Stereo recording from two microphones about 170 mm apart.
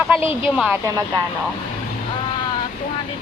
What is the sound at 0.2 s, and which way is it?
Speech, 35° left (ahead or behind).